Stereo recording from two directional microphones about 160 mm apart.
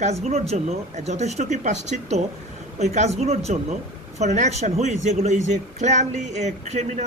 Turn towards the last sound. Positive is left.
turn(degrees=-45)  # may be behind; listen again after turning